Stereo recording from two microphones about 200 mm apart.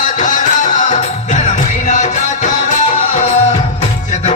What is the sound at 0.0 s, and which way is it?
Music, 40° left (ahead or behind).